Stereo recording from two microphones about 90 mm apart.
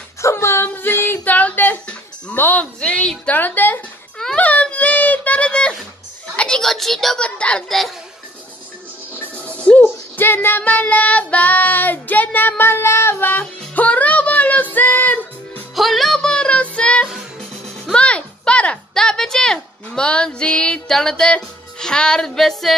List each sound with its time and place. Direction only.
0.2 s dog: 30° left (ahead or behind)
4.4 s a sound: 15° left (ahead or behind)
7.2 s a child's voice: 10° left (ahead or behind)
9.3 s music: 15° left (ahead or behind)
10.1 s child singing: 25° left (ahead or behind)
13.7 s music: 15° left (ahead or behind)
15.7 s music: centre (ahead or behind)